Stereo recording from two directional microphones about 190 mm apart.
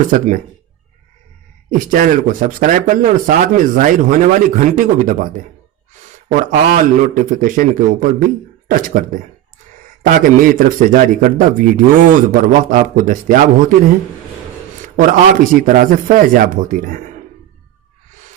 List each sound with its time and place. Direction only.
0.1 s a man's voice: 45° right (ahead or behind)
1.9 s a man's voice: 45° right (ahead or behind)
14.9 s a man's voice: 45° right (ahead or behind)